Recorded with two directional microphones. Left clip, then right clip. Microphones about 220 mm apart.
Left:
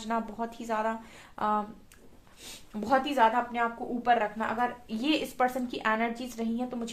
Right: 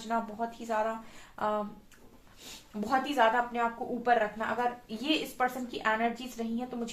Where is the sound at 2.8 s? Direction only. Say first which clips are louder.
Left 2 dB; 45° left (ahead or behind).